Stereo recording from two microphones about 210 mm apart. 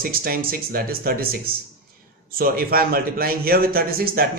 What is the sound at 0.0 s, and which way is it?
A man's voice, 45° right (ahead or behind).